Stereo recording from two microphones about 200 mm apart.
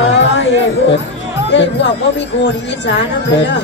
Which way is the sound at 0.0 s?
65° left (ahead or behind).